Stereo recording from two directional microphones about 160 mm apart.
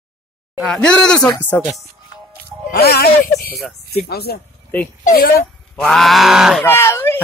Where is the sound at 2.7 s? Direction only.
80° left.